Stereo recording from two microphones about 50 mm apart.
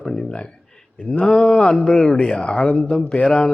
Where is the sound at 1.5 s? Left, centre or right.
Centre.